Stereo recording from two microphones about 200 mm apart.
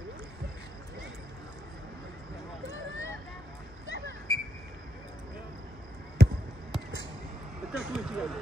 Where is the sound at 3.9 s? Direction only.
65° right (ahead or behind).